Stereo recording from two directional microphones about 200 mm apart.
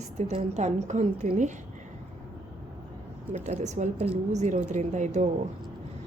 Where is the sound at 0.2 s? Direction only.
35° right (ahead or behind).